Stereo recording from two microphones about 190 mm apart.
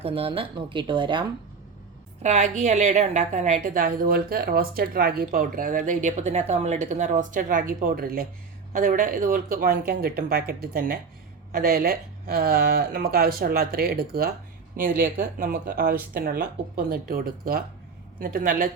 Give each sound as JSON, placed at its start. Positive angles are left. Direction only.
{"t": 0.0, "sound": "speech", "side_deg": -30}
{"t": 2.2, "sound": "a woman's voice", "side_deg": -35}